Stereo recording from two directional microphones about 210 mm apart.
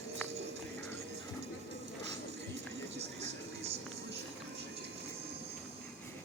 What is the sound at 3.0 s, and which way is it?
Television, 30° right (ahead or behind).